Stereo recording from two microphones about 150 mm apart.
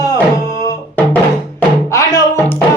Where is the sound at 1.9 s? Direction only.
20° left (ahead or behind).